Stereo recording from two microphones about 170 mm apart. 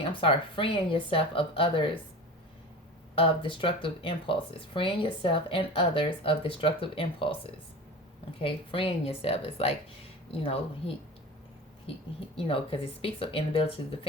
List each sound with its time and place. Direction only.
0.0 s speech: 30° left (ahead or behind)
3.2 s speech: 30° left (ahead or behind)